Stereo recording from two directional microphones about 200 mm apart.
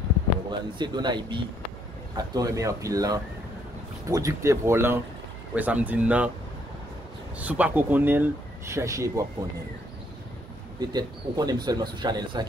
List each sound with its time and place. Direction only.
0.5 s speech: 20° right (ahead or behind); by 6.3 s 5° right (ahead or behind)
7.3 s speech: 5° right (ahead or behind)
10.8 s speech: 20° right (ahead or behind)